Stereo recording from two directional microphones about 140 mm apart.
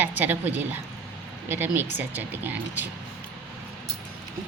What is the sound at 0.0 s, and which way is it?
Speech, 15° right (ahead or behind).